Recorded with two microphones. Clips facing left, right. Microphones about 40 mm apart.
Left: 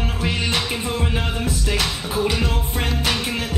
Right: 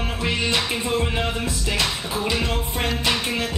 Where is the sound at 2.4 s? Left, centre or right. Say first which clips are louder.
Even; right.